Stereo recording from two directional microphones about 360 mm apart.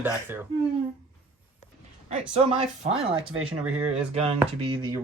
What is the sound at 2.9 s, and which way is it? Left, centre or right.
Speech, centre.